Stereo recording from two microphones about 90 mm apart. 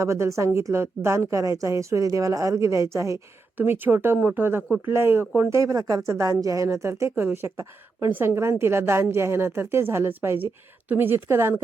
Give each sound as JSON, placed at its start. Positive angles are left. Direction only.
{"t": 0.0, "sound": "a woman's voice", "side_deg": -35}
{"t": 3.6, "sound": "a woman's voice", "side_deg": -25}